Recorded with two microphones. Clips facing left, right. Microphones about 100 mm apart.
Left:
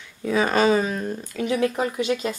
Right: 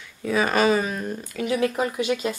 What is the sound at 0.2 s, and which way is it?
Speech, 25° left (ahead or behind).